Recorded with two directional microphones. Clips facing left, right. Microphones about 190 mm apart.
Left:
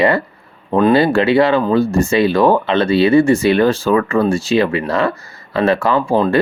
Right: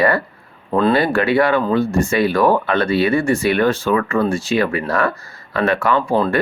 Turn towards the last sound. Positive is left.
turn(degrees=25)  # may be behind; listen again after turning